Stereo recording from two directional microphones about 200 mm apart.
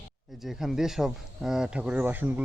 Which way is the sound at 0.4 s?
Centre (ahead or behind).